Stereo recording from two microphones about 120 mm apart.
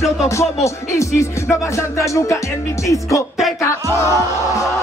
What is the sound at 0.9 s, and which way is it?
Speech, 25° left (ahead or behind).